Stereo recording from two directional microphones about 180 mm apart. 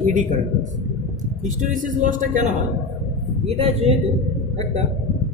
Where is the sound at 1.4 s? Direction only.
45° right (ahead or behind).